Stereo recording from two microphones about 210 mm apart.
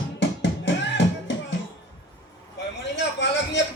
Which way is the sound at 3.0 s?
55° left (ahead or behind).